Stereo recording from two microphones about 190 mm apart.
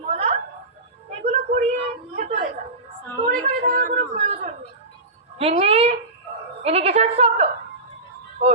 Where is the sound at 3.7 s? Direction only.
45° right (ahead or behind).